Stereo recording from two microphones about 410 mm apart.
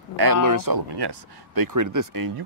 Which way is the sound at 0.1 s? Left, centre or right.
Right.